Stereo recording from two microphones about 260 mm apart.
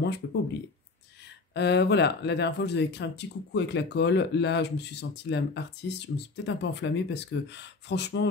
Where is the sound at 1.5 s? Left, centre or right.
Left.